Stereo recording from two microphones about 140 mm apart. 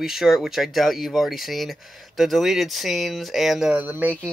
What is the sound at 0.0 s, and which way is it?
Speech, centre (ahead or behind).